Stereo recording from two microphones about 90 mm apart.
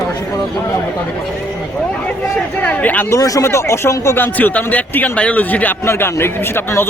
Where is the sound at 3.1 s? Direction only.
40° left (ahead or behind).